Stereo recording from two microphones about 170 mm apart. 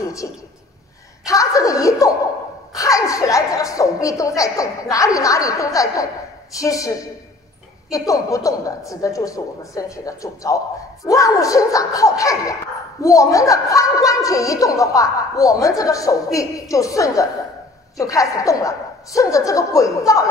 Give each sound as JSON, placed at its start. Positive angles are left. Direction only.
{"t": 0.2, "sound": "a woman's voice", "side_deg": 20}
{"t": 8.1, "sound": "a woman's voice", "side_deg": 20}